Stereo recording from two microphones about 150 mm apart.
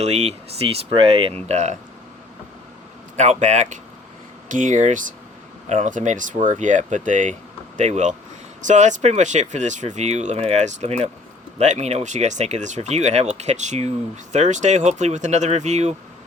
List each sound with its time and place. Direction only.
0.0 s speech: 45° right (ahead or behind)
3.2 s speech: 50° right (ahead or behind)